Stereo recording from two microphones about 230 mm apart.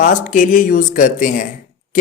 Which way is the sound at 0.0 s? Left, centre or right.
Left.